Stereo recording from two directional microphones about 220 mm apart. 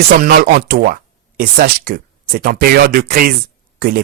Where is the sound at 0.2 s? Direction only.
45° right (ahead or behind).